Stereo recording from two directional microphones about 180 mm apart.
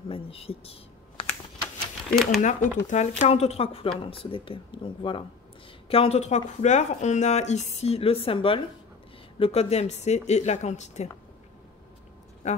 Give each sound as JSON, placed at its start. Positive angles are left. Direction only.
{"t": 0.1, "sound": "speech", "side_deg": 30}
{"t": 2.4, "sound": "speech", "side_deg": 45}
{"t": 12.4, "sound": "speech", "side_deg": 40}